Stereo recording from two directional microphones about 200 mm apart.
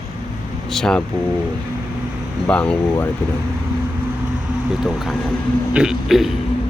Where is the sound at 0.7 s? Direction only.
5° left (ahead or behind).